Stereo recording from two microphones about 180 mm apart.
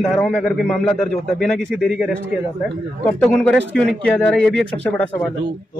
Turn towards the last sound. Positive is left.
turn(degrees=5)  # may be behind; listen again after turning